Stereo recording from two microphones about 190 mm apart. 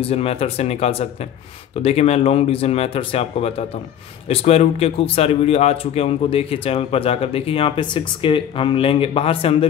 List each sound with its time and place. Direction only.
0.0 s speech: 30° left (ahead or behind)